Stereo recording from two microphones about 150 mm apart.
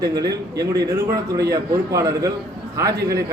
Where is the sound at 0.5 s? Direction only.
90° right.